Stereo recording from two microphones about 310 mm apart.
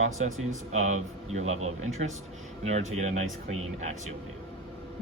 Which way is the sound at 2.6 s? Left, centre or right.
Right.